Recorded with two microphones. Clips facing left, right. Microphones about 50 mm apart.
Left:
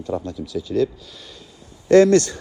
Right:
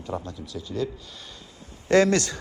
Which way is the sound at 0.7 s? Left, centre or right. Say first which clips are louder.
Left 9 dB; left.